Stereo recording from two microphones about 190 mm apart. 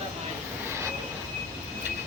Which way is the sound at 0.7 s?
15° right (ahead or behind).